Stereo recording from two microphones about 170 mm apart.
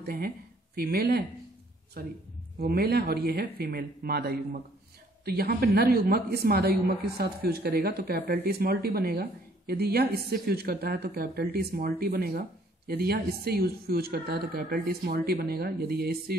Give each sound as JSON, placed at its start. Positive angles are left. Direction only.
{"t": 0.0, "sound": "a woman's voice", "side_deg": -65}